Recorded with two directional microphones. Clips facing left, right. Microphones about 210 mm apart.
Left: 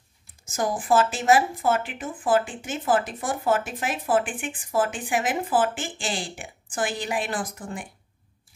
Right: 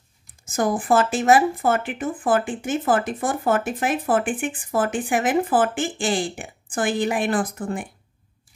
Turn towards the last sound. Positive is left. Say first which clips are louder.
# right 7 dB
turn(degrees=-55)  # may be behind; listen again after turning